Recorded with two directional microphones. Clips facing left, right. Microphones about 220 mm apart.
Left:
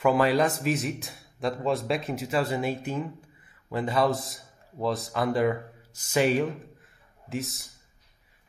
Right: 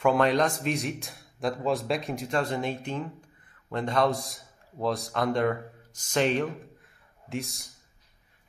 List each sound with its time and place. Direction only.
0.0 s a man's voice: 5° left (ahead or behind)